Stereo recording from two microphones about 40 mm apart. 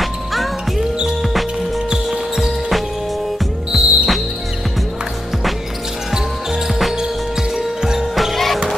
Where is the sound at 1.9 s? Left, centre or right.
Centre.